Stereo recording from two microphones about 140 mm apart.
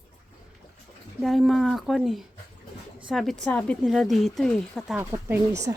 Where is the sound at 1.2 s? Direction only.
Centre (ahead or behind).